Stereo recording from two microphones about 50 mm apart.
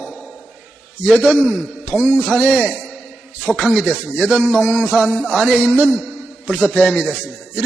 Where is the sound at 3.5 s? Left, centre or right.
Centre.